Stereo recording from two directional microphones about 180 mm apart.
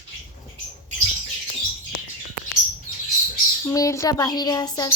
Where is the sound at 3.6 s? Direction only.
15° left (ahead or behind).